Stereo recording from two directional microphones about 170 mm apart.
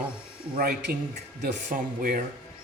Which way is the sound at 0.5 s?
55° right (ahead or behind).